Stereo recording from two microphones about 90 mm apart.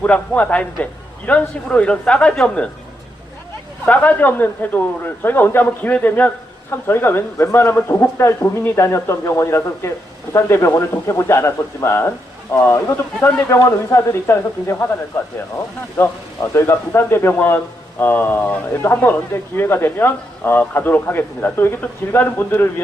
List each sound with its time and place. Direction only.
0.0 s a man's voice: 15° left (ahead or behind)
3.8 s a man's voice: 20° left (ahead or behind)
16.0 s speech: 20° left (ahead or behind)